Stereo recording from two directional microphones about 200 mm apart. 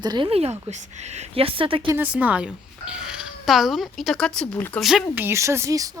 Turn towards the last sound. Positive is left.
turn(degrees=-15)  # may be behind; listen again after turning